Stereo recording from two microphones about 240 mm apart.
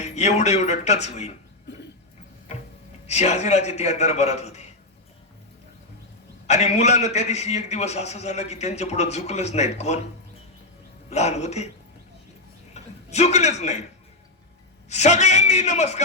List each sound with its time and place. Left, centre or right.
0.0 s a man's voice: left
3.1 s a man's voice: left
6.5 s a man's voice: left
11.1 s a man's voice: left
12.7 s a man's voice: left
14.8 s a man's voice: left